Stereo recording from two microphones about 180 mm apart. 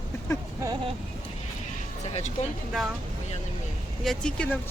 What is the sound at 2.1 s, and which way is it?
Speech, 35° left (ahead or behind).